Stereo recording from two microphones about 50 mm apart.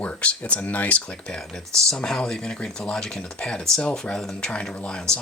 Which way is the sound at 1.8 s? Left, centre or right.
Centre.